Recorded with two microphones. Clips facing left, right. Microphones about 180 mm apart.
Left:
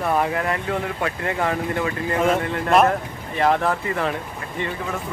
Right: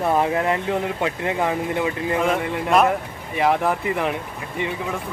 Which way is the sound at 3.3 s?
10° right (ahead or behind).